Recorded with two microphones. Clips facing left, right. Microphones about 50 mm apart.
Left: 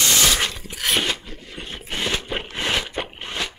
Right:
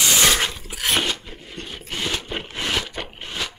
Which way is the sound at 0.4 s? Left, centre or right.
Centre.